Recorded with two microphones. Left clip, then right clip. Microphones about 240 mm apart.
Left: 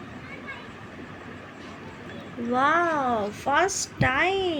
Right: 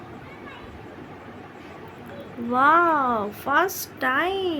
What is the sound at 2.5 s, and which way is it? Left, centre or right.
A woman's voice, right.